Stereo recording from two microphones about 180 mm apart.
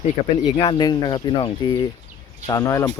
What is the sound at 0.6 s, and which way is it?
Speech, 25° left (ahead or behind).